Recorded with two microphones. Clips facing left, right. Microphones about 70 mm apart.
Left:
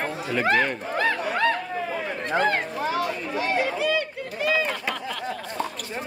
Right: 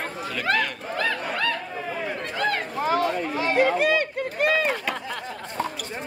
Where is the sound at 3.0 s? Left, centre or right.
Right.